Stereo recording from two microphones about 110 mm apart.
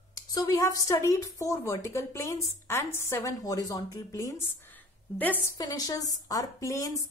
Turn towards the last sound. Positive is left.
turn(degrees=30)  # may be behind; listen again after turning